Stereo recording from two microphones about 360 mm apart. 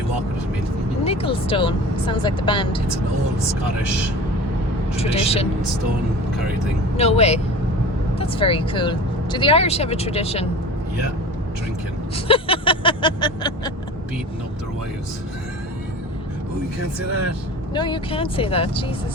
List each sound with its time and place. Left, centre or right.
1.0 s speech: centre
4.9 s speech: centre
6.9 s speech: centre
12.1 s vehicle: centre
17.7 s speech: centre